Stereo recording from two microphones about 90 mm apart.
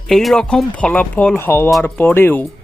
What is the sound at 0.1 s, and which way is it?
Speech, centre (ahead or behind).